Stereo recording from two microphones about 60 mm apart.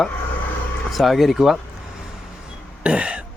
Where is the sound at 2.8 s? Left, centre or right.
Centre.